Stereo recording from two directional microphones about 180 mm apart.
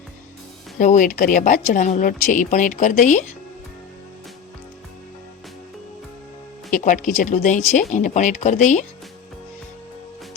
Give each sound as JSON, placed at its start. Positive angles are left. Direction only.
{"t": 0.8, "sound": "a woman's voice", "side_deg": 45}
{"t": 6.7, "sound": "a woman's voice", "side_deg": 45}